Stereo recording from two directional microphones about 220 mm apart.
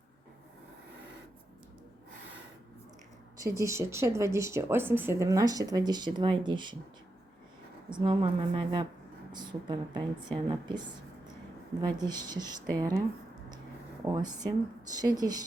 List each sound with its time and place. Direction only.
3.4 s speech: 15° right (ahead or behind)
7.9 s a woman's voice: 20° right (ahead or behind)
14.0 s speech: 15° right (ahead or behind)